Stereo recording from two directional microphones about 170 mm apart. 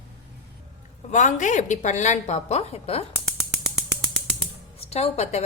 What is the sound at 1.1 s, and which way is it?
A woman's voice, 45° left (ahead or behind).